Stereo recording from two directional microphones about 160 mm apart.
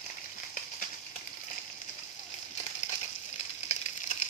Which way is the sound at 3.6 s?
45° left (ahead or behind).